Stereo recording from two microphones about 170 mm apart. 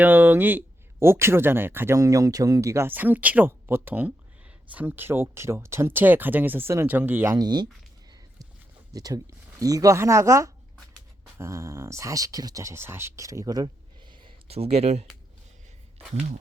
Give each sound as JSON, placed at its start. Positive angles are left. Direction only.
{"t": 0.0, "sound": "speech", "side_deg": -10}
{"t": 7.3, "sound": "speech", "side_deg": -25}
{"t": 8.9, "sound": "speech", "side_deg": -20}
{"t": 14.3, "sound": "speech", "side_deg": -35}